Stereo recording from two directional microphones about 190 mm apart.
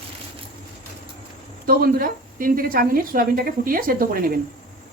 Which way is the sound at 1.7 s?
50° right (ahead or behind).